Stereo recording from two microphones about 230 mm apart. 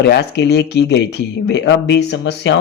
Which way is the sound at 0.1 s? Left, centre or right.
Left.